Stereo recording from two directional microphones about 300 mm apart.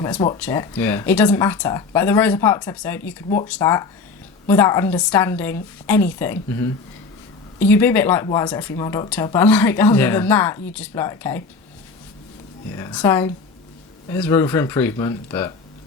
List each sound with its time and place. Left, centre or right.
0.0 s speech: centre
12.7 s speech: centre